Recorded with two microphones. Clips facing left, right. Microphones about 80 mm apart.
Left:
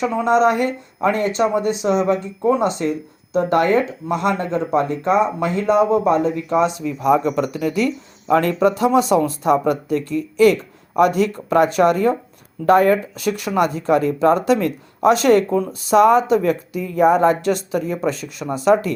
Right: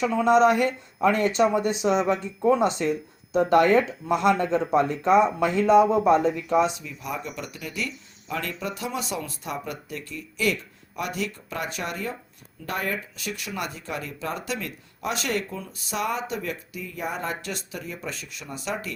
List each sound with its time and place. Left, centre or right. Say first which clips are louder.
0.0 s speech: left 3 dB; left
18.4 s speech: left 16 dB; left